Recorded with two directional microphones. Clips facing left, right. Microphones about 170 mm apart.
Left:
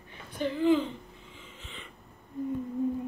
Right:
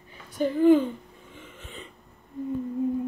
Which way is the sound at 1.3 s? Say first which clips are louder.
Right 7 dB; 55° right (ahead or behind).